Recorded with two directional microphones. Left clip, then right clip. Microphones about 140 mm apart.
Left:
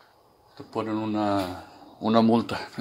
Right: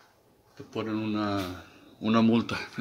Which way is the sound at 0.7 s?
40° right (ahead or behind).